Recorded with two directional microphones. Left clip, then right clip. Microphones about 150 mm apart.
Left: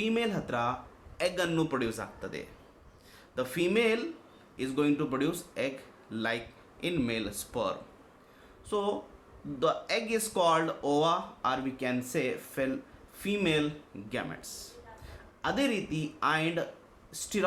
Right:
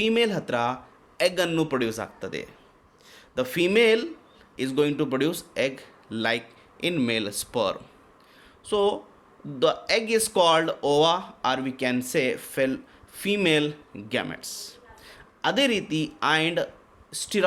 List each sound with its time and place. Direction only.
0.0 s speech: 70° right (ahead or behind)
8.6 s a man's voice: 65° right (ahead or behind)